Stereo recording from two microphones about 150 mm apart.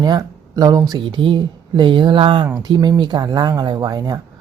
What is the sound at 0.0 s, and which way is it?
Speech, 25° right (ahead or behind).